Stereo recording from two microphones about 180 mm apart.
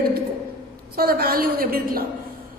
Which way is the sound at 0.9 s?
60° right (ahead or behind).